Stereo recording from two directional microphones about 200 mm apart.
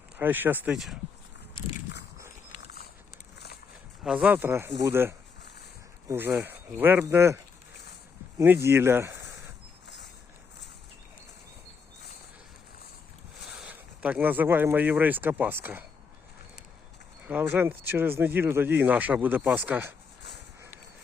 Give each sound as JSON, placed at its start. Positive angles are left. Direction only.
{"t": 0.2, "sound": "speech", "side_deg": -10}
{"t": 3.3, "sound": "a sound", "side_deg": 55}
{"t": 4.0, "sound": "speech", "side_deg": -5}
{"t": 9.8, "sound": "mechanisms", "side_deg": 60}
{"t": 13.6, "sound": "speech", "side_deg": -5}
{"t": 17.2, "sound": "speech", "side_deg": -10}